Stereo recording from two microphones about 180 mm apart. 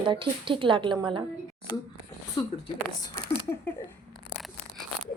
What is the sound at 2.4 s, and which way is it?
Speech, 25° left (ahead or behind).